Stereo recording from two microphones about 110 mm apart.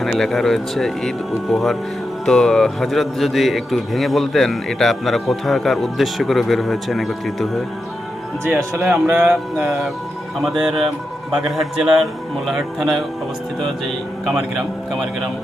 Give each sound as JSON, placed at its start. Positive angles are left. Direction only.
{"t": 0.0, "sound": "a man's voice", "side_deg": 0}
{"t": 8.4, "sound": "speech", "side_deg": -25}
{"t": 8.8, "sound": "a man's voice", "side_deg": -10}
{"t": 14.3, "sound": "a man's voice", "side_deg": -5}